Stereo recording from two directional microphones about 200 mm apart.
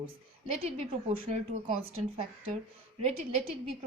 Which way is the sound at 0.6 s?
30° right (ahead or behind).